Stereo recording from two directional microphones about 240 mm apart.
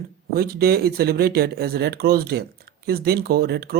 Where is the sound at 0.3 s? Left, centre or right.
Right.